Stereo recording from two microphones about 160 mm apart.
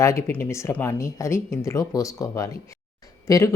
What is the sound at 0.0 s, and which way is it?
Speech, 15° left (ahead or behind).